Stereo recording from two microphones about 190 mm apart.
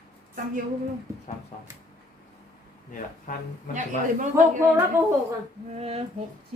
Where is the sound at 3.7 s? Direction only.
40° right (ahead or behind).